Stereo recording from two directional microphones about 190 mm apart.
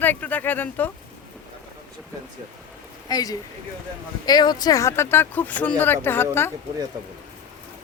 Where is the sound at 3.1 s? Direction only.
20° left (ahead or behind).